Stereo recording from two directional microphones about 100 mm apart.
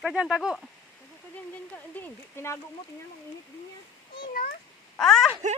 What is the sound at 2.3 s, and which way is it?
Speech, 25° left (ahead or behind).